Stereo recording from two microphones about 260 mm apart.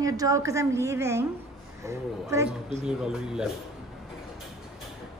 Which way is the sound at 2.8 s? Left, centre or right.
Centre.